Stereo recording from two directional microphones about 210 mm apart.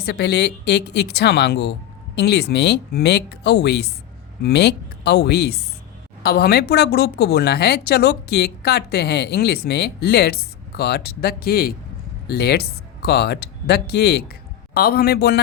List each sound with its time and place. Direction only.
0.0 s speech: 50° left (ahead or behind)